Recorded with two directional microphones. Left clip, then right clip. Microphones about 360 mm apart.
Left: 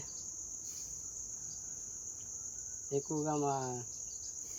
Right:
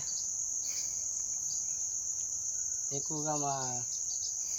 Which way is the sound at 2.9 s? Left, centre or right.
Centre.